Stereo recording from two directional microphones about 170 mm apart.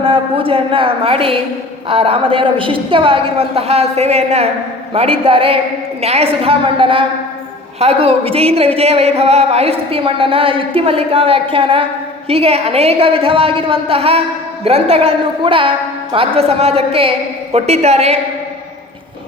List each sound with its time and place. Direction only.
0.0 s a woman's voice: 30° right (ahead or behind)